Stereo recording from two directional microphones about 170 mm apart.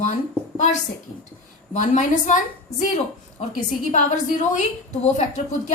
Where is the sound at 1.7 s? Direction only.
45° left (ahead or behind).